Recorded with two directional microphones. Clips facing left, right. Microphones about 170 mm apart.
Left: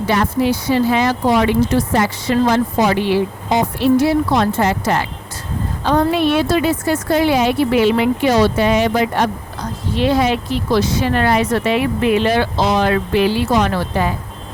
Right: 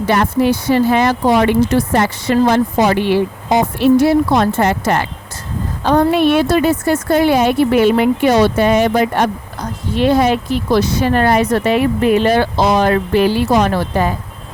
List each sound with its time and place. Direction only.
0.1 s speech: 50° right (ahead or behind)